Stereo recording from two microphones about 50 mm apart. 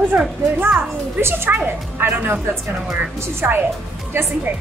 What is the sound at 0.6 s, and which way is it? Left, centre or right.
A woman's voice, right.